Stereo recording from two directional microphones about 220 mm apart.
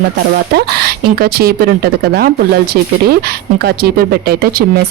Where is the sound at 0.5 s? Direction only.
45° right (ahead or behind).